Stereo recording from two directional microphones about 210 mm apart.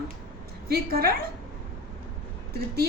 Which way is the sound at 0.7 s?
45° right (ahead or behind).